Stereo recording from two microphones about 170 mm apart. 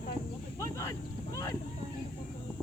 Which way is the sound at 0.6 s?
15° left (ahead or behind).